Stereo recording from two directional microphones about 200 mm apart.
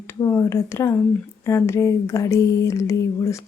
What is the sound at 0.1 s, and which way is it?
Speech, 15° left (ahead or behind).